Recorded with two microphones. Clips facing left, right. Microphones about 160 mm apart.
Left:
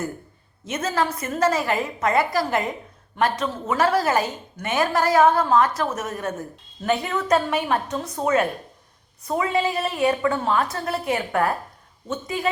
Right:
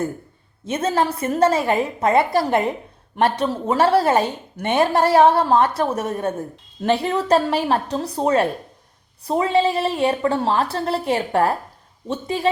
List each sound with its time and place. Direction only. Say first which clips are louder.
0.7 s a woman's voice: right 4 dB; 30° right (ahead or behind)